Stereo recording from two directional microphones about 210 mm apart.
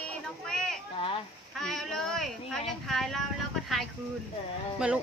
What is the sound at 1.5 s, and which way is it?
Speech, centre (ahead or behind).